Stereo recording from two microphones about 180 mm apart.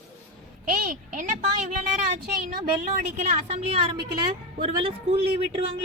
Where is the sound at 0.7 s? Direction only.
45° right (ahead or behind).